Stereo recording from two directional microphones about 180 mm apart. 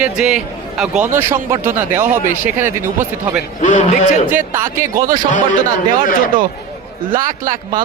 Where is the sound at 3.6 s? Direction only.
45° left (ahead or behind).